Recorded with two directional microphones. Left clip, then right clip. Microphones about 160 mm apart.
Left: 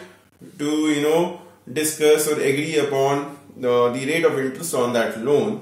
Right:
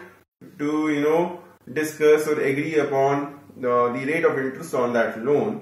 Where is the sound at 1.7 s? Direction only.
20° left (ahead or behind).